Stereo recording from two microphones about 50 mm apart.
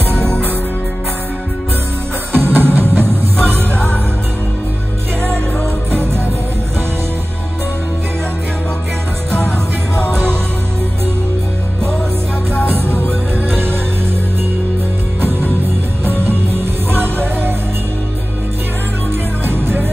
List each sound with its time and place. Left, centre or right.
2.3 s music: right
12.6 s music: right
16.0 s music: right
19.4 s music: right